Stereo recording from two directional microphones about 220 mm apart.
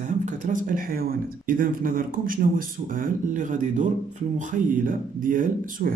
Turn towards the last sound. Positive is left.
turn(degrees=-40)  # may be behind; listen again after turning